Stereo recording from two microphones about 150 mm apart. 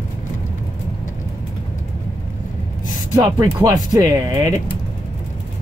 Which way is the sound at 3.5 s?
25° right (ahead or behind).